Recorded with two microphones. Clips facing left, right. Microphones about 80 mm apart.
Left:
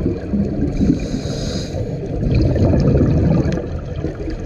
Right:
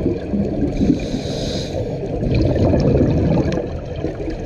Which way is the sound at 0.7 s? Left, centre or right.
Left.